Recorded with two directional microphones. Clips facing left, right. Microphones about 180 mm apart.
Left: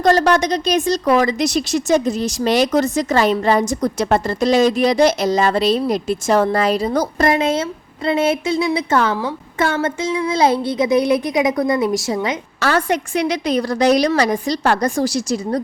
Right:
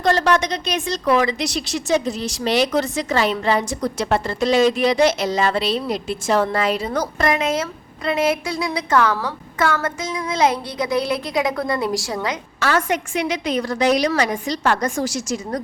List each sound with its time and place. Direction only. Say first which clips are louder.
0.0 s a woman's voice: left 4 dB; 40° left (ahead or behind); by 12.4 s 25° left (ahead or behind)
12.5 s a woman's voice: left 2 dB; 35° left (ahead or behind)